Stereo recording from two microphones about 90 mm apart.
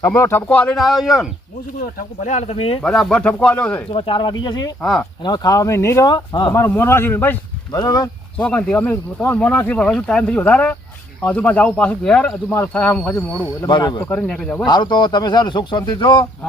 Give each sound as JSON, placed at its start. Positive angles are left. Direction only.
{"t": 0.0, "sound": "a man's voice", "side_deg": 25}
{"t": 0.4, "sound": "speech", "side_deg": 15}
{"t": 0.8, "sound": "speech", "side_deg": 0}
{"t": 2.6, "sound": "speech", "side_deg": 90}
{"t": 2.8, "sound": "speech", "side_deg": 5}
{"t": 3.9, "sound": "speech", "side_deg": 65}
{"t": 6.1, "sound": "speech", "side_deg": 50}
{"t": 6.5, "sound": "a man's voice", "side_deg": 30}
{"t": 7.7, "sound": "speech", "side_deg": 45}
{"t": 8.4, "sound": "speech", "side_deg": 10}
{"t": 13.7, "sound": "speech", "side_deg": 60}
{"t": 14.3, "sound": "speech", "side_deg": 15}
{"t": 14.7, "sound": "speech", "side_deg": 55}